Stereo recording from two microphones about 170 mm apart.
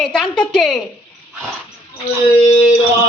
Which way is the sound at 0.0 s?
5° left (ahead or behind).